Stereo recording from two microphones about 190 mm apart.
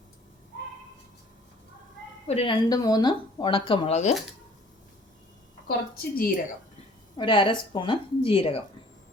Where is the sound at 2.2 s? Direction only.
30° left (ahead or behind).